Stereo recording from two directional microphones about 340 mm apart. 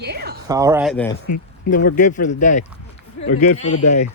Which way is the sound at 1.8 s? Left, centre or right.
Left.